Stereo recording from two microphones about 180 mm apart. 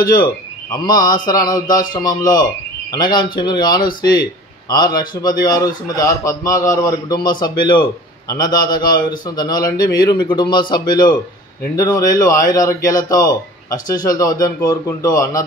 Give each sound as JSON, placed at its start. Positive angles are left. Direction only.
{"t": 0.7, "sound": "a man's voice", "side_deg": 20}